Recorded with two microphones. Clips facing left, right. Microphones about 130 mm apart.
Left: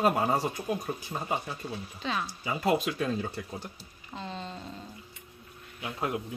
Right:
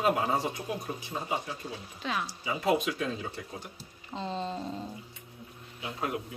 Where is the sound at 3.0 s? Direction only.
45° left (ahead or behind).